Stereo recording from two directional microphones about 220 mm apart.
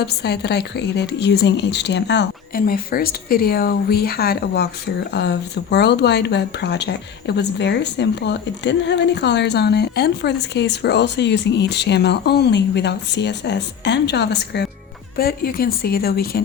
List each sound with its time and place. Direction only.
0.0 s speech: 45° left (ahead or behind)